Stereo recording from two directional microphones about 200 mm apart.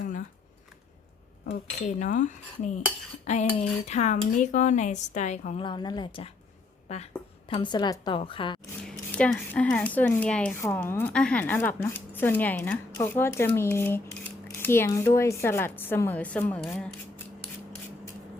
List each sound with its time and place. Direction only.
1.5 s a woman's voice: 40° left (ahead or behind)
8.8 s speech: 5° left (ahead or behind)